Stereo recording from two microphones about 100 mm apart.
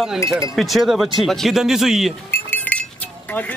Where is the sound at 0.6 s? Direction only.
Centre (ahead or behind).